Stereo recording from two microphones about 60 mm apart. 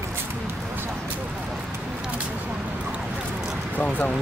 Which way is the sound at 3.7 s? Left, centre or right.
Left.